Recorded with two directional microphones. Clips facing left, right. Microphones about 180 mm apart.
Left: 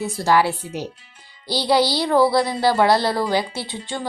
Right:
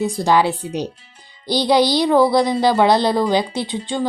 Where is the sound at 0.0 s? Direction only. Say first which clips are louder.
Right 2 dB; 15° right (ahead or behind).